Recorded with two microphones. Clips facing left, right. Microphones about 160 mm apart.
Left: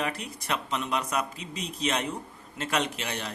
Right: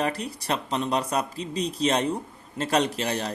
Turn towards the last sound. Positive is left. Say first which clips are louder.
# right 6 dB
turn(degrees=-35)  # may be behind; listen again after turning